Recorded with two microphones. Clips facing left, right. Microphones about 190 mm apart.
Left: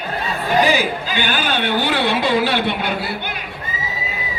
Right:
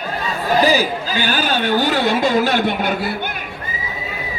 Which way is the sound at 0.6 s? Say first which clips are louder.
Right 2 dB; 40° right (ahead or behind).